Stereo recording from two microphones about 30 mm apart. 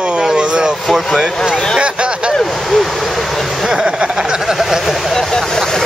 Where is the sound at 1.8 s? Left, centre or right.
Right.